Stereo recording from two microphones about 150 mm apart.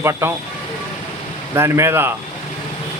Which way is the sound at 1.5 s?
15° right (ahead or behind).